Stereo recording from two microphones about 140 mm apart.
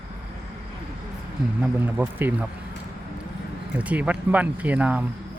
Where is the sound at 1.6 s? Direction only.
15° right (ahead or behind).